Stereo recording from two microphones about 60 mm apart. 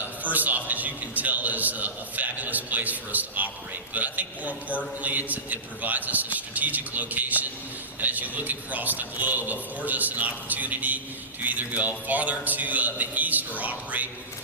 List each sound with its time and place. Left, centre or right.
0.0 s a man's voice: right